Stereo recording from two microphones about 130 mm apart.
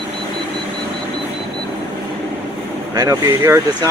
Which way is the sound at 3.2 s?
20° right (ahead or behind).